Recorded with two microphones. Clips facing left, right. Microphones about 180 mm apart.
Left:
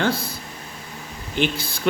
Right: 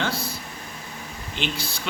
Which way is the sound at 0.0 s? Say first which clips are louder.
Left 5 dB; 55° left (ahead or behind).